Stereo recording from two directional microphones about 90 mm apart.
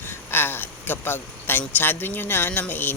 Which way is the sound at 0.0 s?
25° left (ahead or behind).